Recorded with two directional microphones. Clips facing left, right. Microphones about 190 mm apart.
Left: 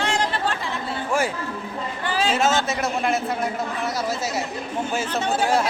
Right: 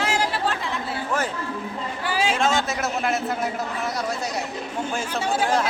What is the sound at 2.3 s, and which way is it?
A man's voice, 5° left (ahead or behind).